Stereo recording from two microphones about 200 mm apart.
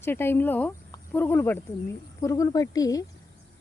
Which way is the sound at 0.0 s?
10° left (ahead or behind).